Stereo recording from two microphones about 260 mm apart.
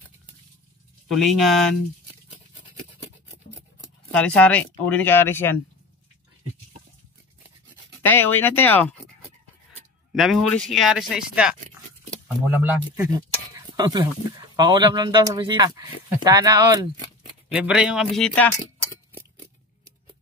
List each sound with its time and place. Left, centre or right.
1.0 s speech: centre
4.1 s speech: centre
8.0 s speech: centre
10.1 s speech: centre
13.6 s a sound: centre
14.5 s speech: centre
17.5 s speech: centre